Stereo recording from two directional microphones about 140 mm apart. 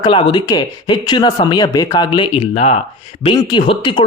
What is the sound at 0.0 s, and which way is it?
Speech, 35° left (ahead or behind).